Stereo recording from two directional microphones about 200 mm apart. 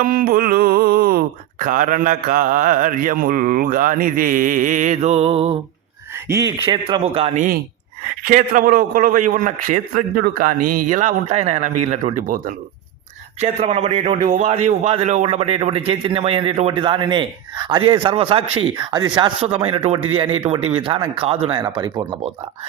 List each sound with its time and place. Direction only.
0.0 s speech: 45° right (ahead or behind)
6.2 s speech: 15° right (ahead or behind)
6.7 s a man's voice: 25° right (ahead or behind)